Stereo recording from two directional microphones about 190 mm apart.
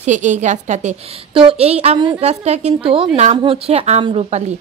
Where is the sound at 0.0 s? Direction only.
40° right (ahead or behind).